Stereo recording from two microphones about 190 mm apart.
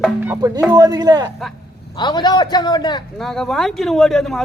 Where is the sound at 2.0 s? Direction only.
25° left (ahead or behind).